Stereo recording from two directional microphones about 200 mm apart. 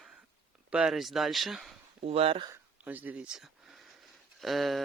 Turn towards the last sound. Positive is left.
turn(degrees=0)  # may be behind; listen again after turning